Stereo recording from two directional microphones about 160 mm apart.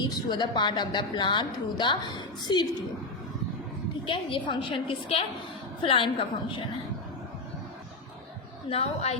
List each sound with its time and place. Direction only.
0.0 s a woman's voice: 25° left (ahead or behind)
4.0 s a woman's voice: 30° left (ahead or behind)
8.7 s a woman's voice: 40° left (ahead or behind)